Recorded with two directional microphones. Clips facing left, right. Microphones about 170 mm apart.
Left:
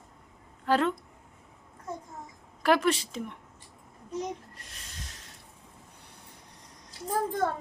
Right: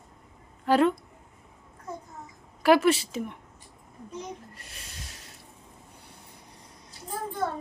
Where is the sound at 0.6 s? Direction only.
10° right (ahead or behind).